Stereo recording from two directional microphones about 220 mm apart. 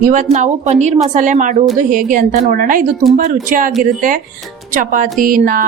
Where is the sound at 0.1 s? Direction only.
35° right (ahead or behind).